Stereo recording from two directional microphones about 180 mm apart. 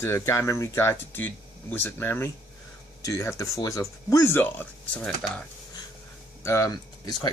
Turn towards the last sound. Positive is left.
turn(degrees=20)  # may be behind; listen again after turning